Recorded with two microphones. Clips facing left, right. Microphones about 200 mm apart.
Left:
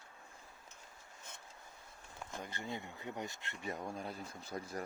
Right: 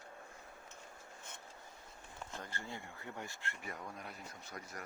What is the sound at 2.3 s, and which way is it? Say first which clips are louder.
Speech: left 4 dB; 15° left (ahead or behind).